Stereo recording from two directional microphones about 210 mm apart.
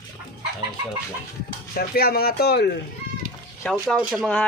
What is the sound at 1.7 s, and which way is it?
Speech, 45° left (ahead or behind).